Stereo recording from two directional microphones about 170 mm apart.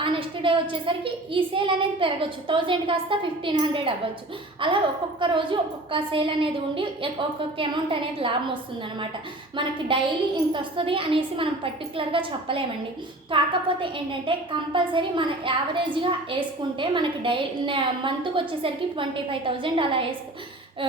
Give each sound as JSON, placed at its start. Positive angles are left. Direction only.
{"t": 0.0, "sound": "a child's voice", "side_deg": -30}
{"t": 9.6, "sound": "a child's voice", "side_deg": -30}